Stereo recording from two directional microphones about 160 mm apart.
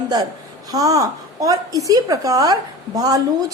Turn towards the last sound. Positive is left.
turn(degrees=-25)  # may be behind; listen again after turning